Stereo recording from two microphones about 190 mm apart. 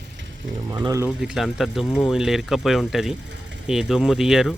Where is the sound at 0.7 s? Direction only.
20° right (ahead or behind).